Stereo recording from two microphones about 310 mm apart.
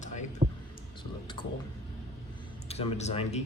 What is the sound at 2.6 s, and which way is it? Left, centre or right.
Speech, left.